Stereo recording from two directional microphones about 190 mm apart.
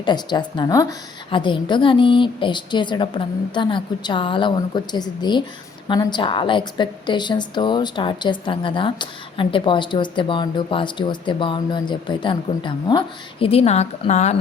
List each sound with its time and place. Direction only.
0.0 s a woman's voice: 25° left (ahead or behind)